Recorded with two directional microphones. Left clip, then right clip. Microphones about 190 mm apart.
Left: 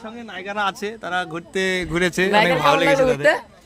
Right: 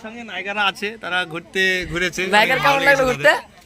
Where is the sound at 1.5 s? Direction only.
35° left (ahead or behind); by 2.3 s 50° left (ahead or behind).